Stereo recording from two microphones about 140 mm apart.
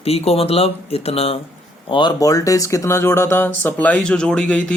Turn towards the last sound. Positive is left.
turn(degrees=10)  # may be behind; listen again after turning